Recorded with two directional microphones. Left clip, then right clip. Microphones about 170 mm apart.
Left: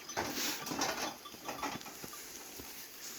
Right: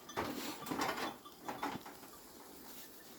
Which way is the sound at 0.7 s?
40° left (ahead or behind).